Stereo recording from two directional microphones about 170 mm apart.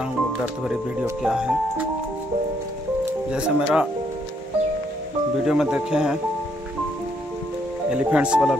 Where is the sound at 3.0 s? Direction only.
5° right (ahead or behind).